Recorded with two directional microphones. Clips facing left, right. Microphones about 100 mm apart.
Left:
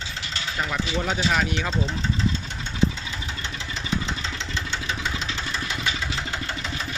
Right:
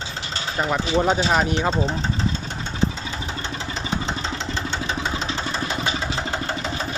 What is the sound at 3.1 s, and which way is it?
Engine, 35° right (ahead or behind).